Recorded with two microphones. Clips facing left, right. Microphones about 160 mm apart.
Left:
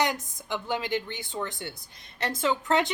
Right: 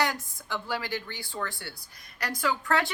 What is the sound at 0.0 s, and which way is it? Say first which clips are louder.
A woman's voice: left 2 dB; 20° left (ahead or behind).